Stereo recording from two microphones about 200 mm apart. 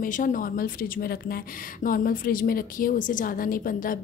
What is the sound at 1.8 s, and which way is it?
A woman's voice, 45° left (ahead or behind).